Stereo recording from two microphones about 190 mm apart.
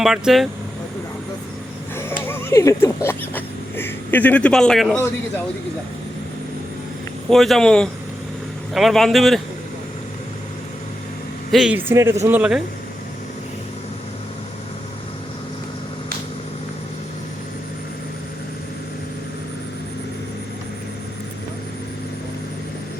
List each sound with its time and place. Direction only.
0.0 s speech: centre (ahead or behind)
2.0 s speech: 10° left (ahead or behind)
7.3 s speech: centre (ahead or behind)
11.5 s a man's voice: 5° right (ahead or behind)